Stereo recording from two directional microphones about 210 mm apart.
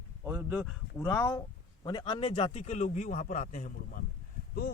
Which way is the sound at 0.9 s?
10° left (ahead or behind).